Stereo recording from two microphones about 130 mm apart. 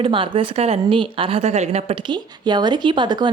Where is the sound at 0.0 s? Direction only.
40° right (ahead or behind).